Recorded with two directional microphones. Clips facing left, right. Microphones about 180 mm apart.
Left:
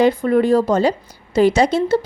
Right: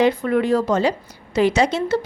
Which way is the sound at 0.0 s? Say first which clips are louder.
Left 3 dB; 35° left (ahead or behind).